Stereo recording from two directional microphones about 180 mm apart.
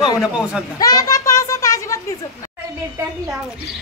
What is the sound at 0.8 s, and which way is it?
Children playing, 20° left (ahead or behind).